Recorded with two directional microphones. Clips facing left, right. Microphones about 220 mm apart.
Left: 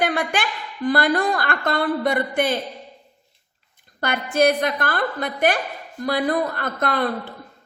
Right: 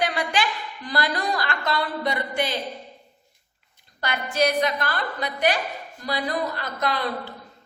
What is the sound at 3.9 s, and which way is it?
A woman's voice, 50° left (ahead or behind).